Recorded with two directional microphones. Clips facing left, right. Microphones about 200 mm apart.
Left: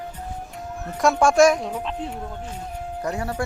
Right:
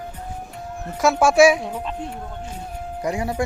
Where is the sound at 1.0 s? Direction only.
5° right (ahead or behind).